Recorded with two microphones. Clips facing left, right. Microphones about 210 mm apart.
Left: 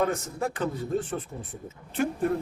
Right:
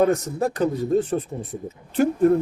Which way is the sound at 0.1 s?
40° right (ahead or behind).